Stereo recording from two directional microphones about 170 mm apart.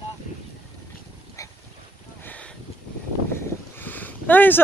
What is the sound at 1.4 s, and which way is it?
Boat, 20° left (ahead or behind).